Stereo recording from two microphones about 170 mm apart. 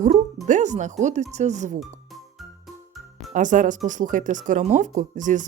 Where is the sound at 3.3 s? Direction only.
50° right (ahead or behind).